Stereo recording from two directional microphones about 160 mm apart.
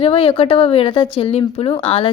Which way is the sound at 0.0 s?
35° left (ahead or behind).